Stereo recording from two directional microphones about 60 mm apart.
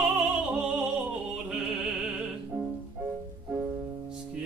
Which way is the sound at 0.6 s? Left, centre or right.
Centre.